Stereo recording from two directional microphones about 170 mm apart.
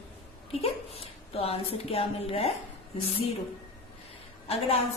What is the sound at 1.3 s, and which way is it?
A woman's voice, 35° left (ahead or behind).